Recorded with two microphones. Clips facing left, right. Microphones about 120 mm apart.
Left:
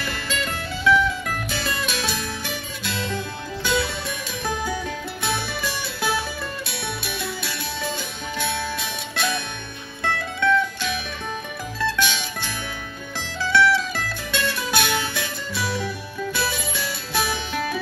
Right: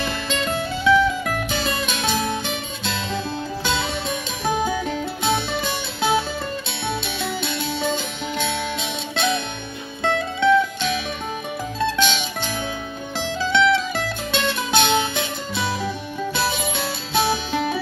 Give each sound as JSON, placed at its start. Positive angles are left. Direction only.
{"t": 0.0, "sound": "music", "side_deg": -20}